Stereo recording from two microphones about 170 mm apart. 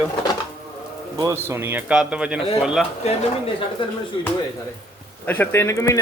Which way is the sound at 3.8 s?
30° left (ahead or behind).